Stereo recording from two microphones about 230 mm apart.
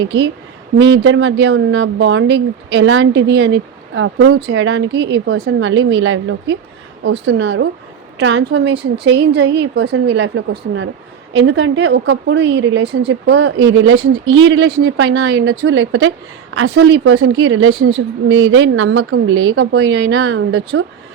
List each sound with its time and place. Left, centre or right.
0.0 s speech: right